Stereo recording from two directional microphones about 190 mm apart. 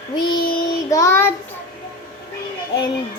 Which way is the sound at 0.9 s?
15° left (ahead or behind).